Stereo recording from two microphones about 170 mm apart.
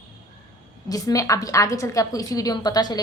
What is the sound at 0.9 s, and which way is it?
A woman's voice, 20° left (ahead or behind).